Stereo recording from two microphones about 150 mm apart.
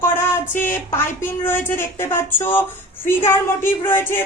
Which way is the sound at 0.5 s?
15° left (ahead or behind).